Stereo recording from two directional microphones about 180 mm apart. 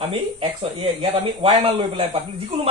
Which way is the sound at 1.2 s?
30° right (ahead or behind).